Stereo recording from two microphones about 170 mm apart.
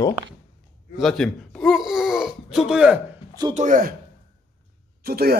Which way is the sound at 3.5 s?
50° right (ahead or behind).